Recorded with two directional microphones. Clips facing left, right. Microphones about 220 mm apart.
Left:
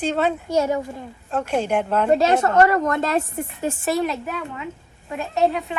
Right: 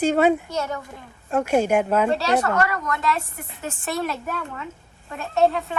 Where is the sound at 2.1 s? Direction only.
25° left (ahead or behind).